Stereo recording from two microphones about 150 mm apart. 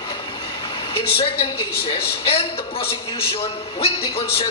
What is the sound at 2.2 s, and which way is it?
A man's voice, 40° left (ahead or behind).